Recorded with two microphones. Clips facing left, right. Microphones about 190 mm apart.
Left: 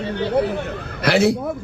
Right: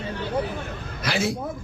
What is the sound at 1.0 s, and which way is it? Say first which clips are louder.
Speech: left 9 dB; 70° left (ahead or behind).